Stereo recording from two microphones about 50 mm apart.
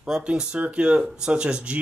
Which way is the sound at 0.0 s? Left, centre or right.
Centre.